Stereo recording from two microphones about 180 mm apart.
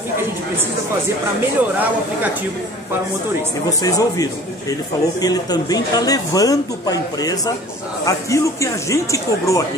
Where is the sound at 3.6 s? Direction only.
20° left (ahead or behind).